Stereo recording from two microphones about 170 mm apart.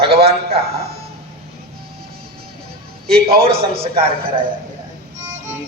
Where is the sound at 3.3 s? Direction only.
35° right (ahead or behind).